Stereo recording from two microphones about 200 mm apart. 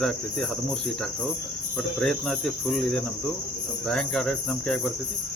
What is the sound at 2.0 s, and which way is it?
Cricket, centre (ahead or behind).